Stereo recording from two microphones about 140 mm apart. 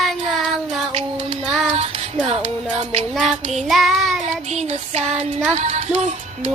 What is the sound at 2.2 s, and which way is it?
Child singing, 50° right (ahead or behind).